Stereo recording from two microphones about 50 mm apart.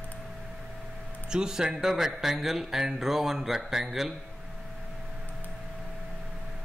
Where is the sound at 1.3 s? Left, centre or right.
Centre.